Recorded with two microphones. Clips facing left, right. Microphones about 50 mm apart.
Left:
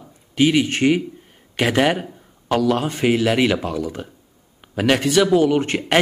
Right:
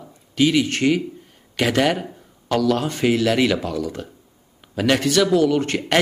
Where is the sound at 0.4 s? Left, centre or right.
Centre.